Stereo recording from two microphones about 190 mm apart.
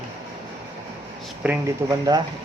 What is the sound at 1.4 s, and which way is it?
Speech, 10° right (ahead or behind).